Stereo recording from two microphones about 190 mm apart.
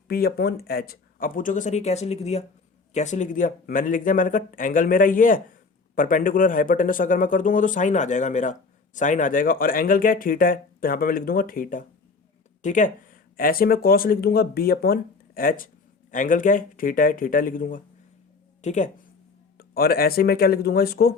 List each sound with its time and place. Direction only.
0.1 s speech: 55° left (ahead or behind); by 18.9 s 40° left (ahead or behind)
19.5 s speech: 50° left (ahead or behind)